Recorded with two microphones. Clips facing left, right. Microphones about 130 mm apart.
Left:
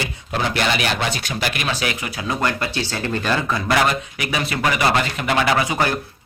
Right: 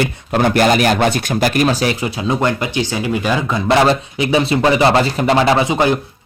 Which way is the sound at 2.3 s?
20° right (ahead or behind).